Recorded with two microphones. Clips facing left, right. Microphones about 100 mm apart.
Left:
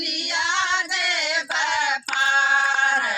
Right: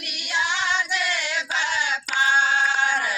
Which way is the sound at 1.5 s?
60° left (ahead or behind).